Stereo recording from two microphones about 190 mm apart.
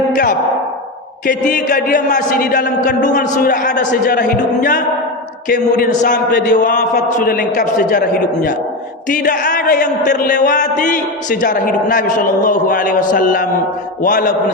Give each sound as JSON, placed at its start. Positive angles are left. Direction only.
{"t": 0.1, "sound": "a man's voice", "side_deg": 45}